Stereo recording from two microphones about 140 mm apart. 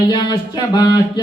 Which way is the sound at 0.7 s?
30° left (ahead or behind).